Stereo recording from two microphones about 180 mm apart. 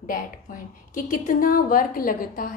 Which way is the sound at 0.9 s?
50° left (ahead or behind).